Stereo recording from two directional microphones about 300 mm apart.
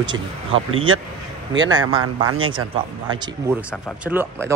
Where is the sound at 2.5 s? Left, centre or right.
Centre.